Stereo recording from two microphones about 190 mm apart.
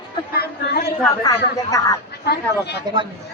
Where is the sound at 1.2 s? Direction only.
20° left (ahead or behind).